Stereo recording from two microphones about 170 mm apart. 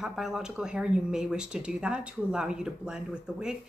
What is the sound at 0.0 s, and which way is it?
Speech, centre (ahead or behind).